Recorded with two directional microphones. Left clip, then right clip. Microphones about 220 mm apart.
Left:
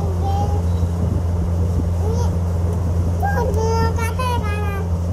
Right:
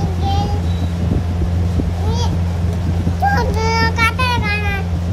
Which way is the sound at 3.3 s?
45° right (ahead or behind).